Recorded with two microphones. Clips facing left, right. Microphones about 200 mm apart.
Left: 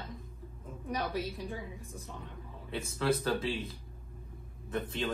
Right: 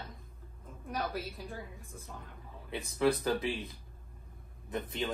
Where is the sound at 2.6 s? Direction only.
15° right (ahead or behind).